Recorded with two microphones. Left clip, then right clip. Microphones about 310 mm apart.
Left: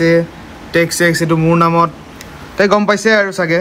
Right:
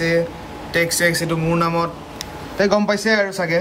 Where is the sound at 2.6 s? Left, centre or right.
Centre.